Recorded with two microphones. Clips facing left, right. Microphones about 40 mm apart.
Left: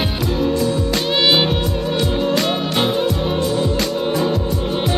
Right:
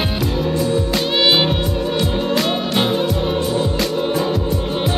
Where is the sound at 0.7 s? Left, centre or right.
Right.